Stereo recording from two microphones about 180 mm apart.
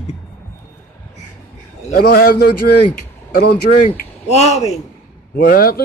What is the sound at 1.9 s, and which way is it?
A man's voice, 55° left (ahead or behind).